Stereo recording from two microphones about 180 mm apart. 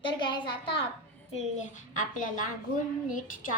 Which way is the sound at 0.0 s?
25° left (ahead or behind).